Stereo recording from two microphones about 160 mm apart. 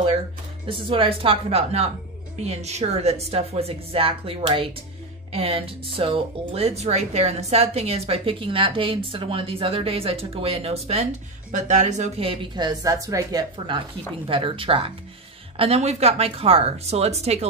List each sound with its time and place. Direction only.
0.7 s speech: 35° right (ahead or behind)